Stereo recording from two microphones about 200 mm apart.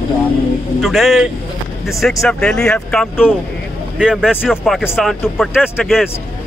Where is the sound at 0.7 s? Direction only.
Centre (ahead or behind).